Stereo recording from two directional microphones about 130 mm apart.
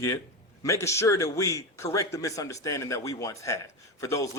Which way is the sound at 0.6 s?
20° left (ahead or behind).